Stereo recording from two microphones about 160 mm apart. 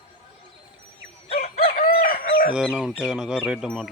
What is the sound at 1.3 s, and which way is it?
Fowl, 70° left (ahead or behind).